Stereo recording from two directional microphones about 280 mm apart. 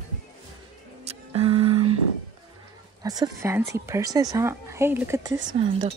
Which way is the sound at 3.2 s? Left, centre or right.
Centre.